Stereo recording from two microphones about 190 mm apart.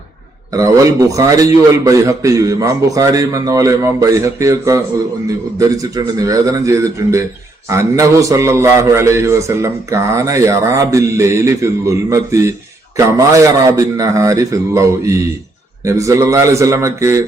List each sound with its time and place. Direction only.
0.5 s a man's voice: 15° right (ahead or behind)